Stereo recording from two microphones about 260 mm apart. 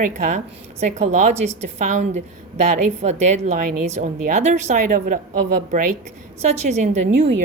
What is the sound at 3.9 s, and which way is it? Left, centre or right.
A woman's voice, right.